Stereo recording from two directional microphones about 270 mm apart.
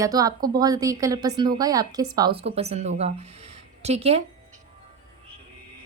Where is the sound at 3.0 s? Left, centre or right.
Right.